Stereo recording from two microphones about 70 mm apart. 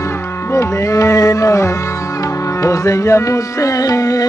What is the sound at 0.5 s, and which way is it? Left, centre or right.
Music, left.